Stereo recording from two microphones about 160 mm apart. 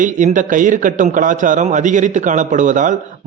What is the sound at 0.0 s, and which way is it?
A man's voice, 55° right (ahead or behind).